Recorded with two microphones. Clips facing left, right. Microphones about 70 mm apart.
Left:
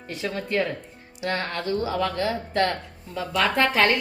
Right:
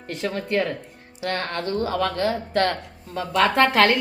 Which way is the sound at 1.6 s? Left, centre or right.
Right.